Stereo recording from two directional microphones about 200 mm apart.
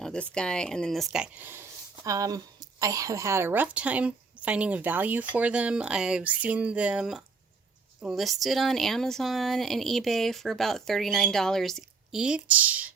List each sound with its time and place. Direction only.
0.0 s a woman's voice: 5° left (ahead or behind)